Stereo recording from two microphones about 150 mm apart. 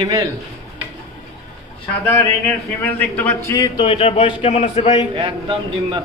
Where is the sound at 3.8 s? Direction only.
35° left (ahead or behind).